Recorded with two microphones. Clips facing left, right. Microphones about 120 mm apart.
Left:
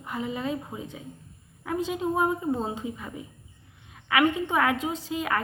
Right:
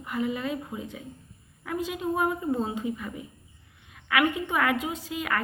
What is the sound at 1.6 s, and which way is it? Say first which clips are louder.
A woman's voice: left 2 dB; 25° left (ahead or behind).